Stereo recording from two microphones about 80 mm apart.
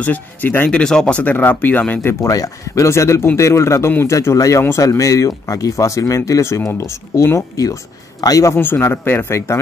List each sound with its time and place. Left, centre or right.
0.0 s speech: left
0.7 s speech: centre
2.2 s a man's voice: left
8.5 s speech: left